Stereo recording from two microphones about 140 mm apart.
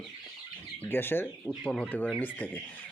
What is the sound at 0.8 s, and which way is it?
Speech, 15° left (ahead or behind).